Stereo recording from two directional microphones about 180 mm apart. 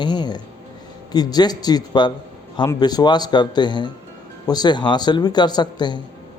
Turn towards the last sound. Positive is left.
turn(degrees=25)  # may be behind; listen again after turning